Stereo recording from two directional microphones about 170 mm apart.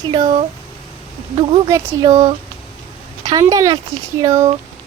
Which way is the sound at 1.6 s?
20° right (ahead or behind).